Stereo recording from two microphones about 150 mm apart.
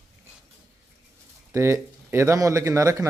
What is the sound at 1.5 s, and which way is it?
Speech, 20° right (ahead or behind).